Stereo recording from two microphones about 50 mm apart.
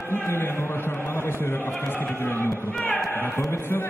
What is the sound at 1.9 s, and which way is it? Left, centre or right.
Music, left.